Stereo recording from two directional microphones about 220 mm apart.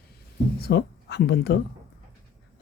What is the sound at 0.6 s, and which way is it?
Speech, 50° left (ahead or behind).